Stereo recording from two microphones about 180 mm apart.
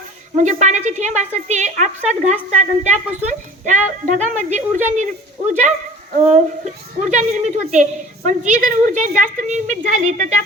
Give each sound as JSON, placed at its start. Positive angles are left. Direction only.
{"t": 0.3, "sound": "a woman's voice", "side_deg": -40}
{"t": 6.1, "sound": "a woman's voice", "side_deg": -40}